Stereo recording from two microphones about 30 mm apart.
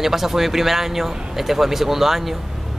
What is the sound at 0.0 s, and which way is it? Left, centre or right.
Speech, centre.